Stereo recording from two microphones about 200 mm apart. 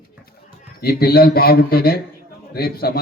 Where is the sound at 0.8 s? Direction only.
50° left (ahead or behind).